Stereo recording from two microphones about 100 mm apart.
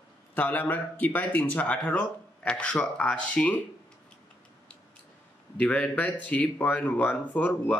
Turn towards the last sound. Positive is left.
turn(degrees=15)  # may be behind; listen again after turning